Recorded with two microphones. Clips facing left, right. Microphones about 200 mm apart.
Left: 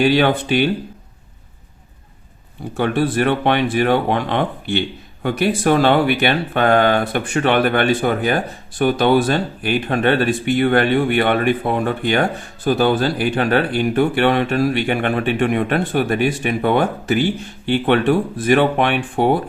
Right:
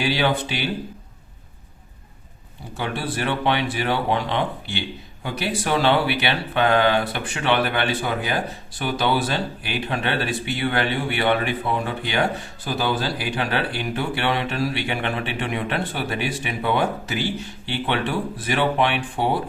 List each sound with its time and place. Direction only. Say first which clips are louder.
0.0 s speech: left 7 dB; 55° left (ahead or behind)
2.7 s speech: left 9 dB; 55° left (ahead or behind)